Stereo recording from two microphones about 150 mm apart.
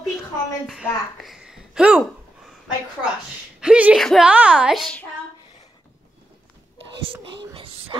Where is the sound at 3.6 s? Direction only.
5° right (ahead or behind).